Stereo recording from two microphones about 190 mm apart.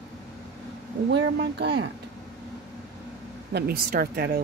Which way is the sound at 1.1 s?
65° right (ahead or behind).